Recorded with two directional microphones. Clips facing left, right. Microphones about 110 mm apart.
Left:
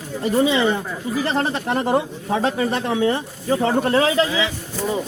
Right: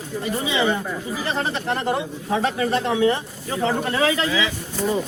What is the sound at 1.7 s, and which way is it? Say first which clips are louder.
Speech: left 4 dB; 15° left (ahead or behind).